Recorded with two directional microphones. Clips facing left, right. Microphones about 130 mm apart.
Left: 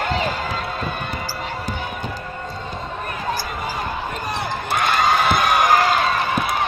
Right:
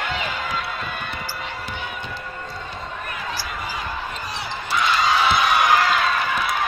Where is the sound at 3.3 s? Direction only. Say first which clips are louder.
Left 6 dB; 50° left (ahead or behind).